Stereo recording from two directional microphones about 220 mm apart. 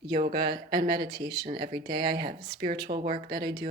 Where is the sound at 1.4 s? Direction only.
40° right (ahead or behind).